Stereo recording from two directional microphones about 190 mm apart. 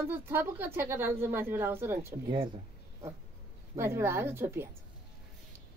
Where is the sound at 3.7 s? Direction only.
15° right (ahead or behind).